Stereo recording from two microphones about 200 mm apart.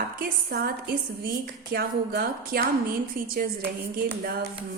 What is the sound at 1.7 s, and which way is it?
Speech, 50° right (ahead or behind).